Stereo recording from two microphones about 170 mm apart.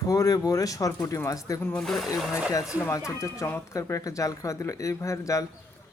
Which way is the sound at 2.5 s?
20° left (ahead or behind).